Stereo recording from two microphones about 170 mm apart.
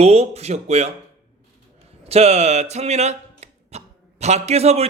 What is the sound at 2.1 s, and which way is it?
Speech, 40° right (ahead or behind).